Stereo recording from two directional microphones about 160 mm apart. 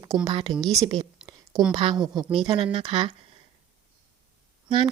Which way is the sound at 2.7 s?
35° right (ahead or behind).